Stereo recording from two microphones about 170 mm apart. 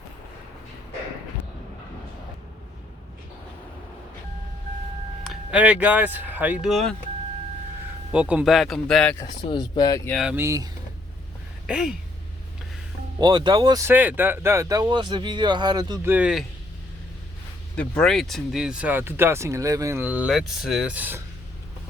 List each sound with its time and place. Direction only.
5.2 s speech: 5° right (ahead or behind)
8.1 s speech: 10° right (ahead or behind)
9.1 s speech: 25° left (ahead or behind)
10.1 s speech: centre (ahead or behind)
10.3 s speech: 15° right (ahead or behind)
11.6 s speech: 5° right (ahead or behind)
13.1 s speech: 25° right (ahead or behind)
13.8 s speech: 10° right (ahead or behind)
16.0 s speech: 10° right (ahead or behind)
17.7 s speech: 5° left (ahead or behind)